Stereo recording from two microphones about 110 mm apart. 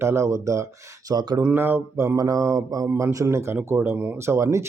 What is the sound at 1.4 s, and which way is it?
Speech, 20° right (ahead or behind).